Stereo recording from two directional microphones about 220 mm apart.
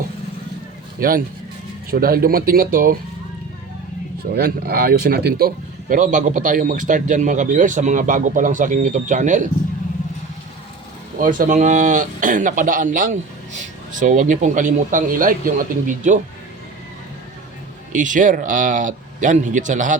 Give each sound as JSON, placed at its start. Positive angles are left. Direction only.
{"t": 0.9, "sound": "speech", "side_deg": -40}
{"t": 4.4, "sound": "speech", "side_deg": -45}
{"t": 11.2, "sound": "speech", "side_deg": -35}
{"t": 17.9, "sound": "speech", "side_deg": -35}